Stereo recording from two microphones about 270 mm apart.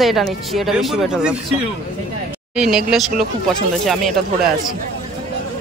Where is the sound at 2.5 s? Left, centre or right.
Centre.